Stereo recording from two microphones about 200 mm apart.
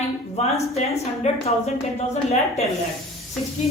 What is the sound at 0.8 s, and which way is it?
A woman's voice, 30° left (ahead or behind).